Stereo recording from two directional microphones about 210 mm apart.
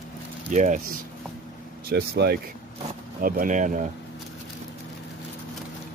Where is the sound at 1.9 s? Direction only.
50° right (ahead or behind).